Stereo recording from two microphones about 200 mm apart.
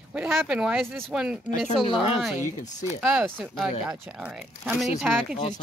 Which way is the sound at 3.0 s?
5° right (ahead or behind).